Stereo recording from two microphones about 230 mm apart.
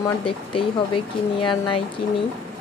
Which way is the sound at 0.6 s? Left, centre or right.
Left.